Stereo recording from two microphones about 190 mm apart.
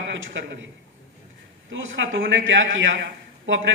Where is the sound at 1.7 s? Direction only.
90° right.